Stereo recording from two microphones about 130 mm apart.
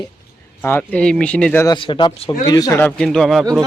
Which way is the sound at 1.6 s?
35° left (ahead or behind).